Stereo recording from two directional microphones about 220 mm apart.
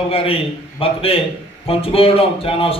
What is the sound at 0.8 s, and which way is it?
A man's voice, 25° left (ahead or behind).